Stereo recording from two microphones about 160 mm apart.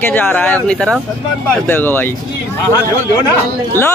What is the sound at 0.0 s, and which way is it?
A man's voice, 10° left (ahead or behind).